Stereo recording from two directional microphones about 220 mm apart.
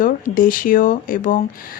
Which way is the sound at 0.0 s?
40° left (ahead or behind).